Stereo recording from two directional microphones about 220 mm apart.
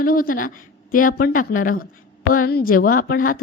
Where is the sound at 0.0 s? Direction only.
40° left (ahead or behind).